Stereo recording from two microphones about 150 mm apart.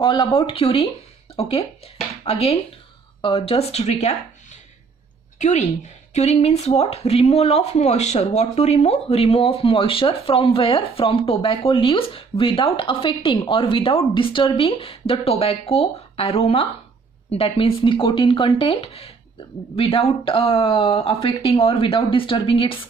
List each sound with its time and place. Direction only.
0.0 s speech: 30° left (ahead or behind); by 4.2 s 45° left (ahead or behind)
6.1 s speech: 45° left (ahead or behind)